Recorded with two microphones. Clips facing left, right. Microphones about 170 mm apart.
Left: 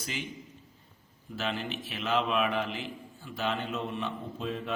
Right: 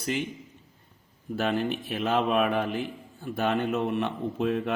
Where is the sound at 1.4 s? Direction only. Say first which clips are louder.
Right 7 dB; 50° right (ahead or behind).